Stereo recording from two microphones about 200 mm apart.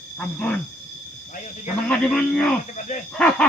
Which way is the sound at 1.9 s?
5° left (ahead or behind).